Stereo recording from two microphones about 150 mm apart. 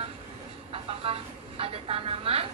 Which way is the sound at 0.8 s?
40° right (ahead or behind).